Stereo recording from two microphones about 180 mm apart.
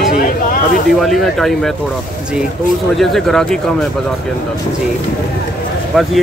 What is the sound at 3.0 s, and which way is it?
Speech, centre (ahead or behind).